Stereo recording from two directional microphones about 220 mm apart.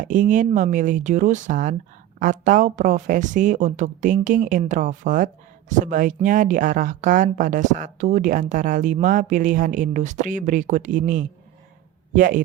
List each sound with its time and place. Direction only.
0.0 s a woman's voice: 35° right (ahead or behind)